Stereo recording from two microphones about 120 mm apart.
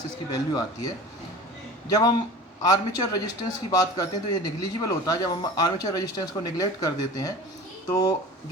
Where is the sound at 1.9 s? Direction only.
30° left (ahead or behind).